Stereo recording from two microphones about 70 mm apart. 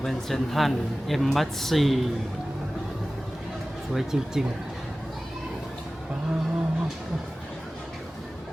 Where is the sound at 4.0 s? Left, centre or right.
Centre.